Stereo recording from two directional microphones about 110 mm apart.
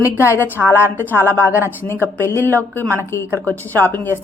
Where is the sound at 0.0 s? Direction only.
25° left (ahead or behind).